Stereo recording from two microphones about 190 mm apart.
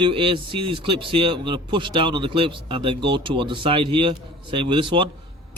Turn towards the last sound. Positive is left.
turn(degrees=-25)  # may be behind; listen again after turning